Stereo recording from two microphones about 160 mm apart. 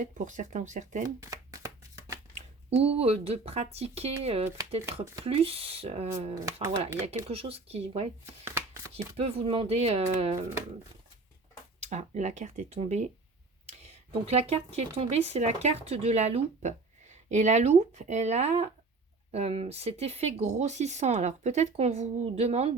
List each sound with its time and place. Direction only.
0.0 s speech: 50° right (ahead or behind)
1.2 s a sound: 20° right (ahead or behind)
2.6 s speech: 40° right (ahead or behind)
8.2 s shuffling cards: 15° right (ahead or behind)
8.9 s speech: 40° right (ahead or behind)
11.8 s speech: 45° right (ahead or behind)
14.1 s speech: 40° right (ahead or behind)